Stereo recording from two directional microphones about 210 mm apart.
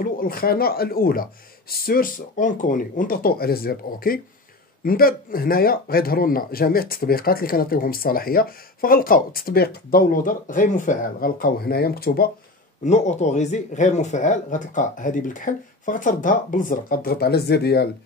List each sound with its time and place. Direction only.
0.0 s speech: 45° left (ahead or behind)
12.8 s speech: 35° left (ahead or behind); by 17.8 s 50° left (ahead or behind)